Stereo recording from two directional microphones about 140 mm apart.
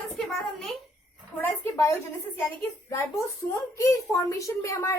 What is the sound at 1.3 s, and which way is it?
A woman's voice, 15° left (ahead or behind).